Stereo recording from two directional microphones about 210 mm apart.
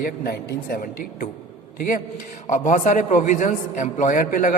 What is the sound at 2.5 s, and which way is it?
A man's voice, 35° left (ahead or behind).